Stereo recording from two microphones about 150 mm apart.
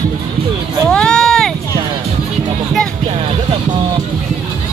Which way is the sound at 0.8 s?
5° left (ahead or behind).